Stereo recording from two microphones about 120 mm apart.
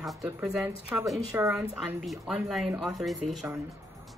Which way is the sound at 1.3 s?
20° right (ahead or behind).